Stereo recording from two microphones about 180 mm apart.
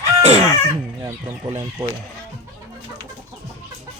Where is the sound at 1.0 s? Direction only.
20° right (ahead or behind).